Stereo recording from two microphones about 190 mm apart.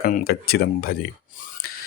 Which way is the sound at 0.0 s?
50° left (ahead or behind).